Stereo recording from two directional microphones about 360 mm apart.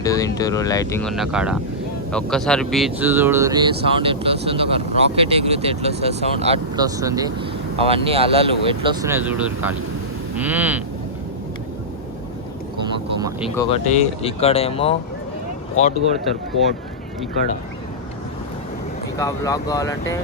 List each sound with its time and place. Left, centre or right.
0.0 s vehicle: centre
0.3 s speech: centre
10.3 s a sound: centre
13.6 s speech: centre
19.2 s speech: centre